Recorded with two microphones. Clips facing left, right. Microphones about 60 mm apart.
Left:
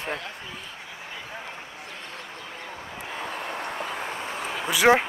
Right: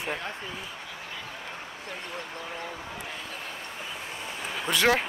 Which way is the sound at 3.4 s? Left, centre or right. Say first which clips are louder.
Left 7 dB; left.